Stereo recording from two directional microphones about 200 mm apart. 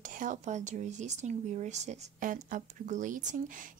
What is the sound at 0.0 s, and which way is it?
Speech, 40° right (ahead or behind).